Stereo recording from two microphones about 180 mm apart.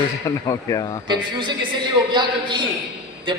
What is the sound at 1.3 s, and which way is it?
A man's voice, 25° right (ahead or behind).